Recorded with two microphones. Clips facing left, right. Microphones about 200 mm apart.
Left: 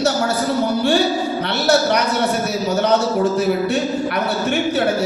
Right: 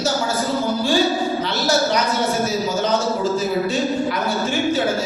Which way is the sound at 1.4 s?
65° left (ahead or behind).